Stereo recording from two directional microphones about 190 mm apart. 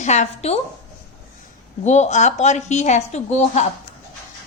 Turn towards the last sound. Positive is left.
turn(degrees=35)  # may be behind; listen again after turning